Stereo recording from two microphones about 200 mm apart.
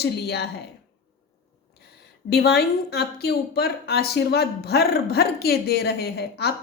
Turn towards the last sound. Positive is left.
turn(degrees=55)  # may be behind; listen again after turning